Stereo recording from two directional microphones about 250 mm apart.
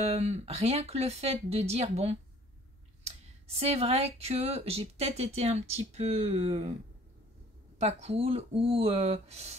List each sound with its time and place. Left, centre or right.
0.0 s speech: right
7.8 s speech: right